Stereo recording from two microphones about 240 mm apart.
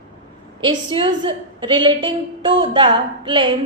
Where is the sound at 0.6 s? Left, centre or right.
Right.